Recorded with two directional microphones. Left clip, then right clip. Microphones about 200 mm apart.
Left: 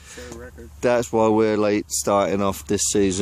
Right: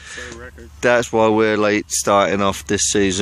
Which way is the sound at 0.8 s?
Centre (ahead or behind).